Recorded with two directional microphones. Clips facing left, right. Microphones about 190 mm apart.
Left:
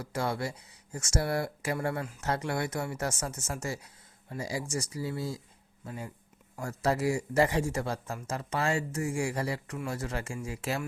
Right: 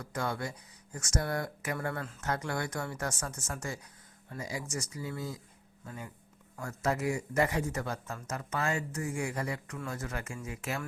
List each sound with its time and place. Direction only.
0.0 s a man's voice: 25° left (ahead or behind)
6.6 s a man's voice: 30° left (ahead or behind)